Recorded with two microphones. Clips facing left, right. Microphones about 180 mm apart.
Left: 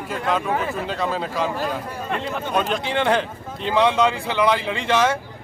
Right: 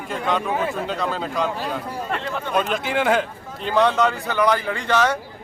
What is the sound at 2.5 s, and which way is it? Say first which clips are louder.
Speech: right 1 dB; 5° right (ahead or behind).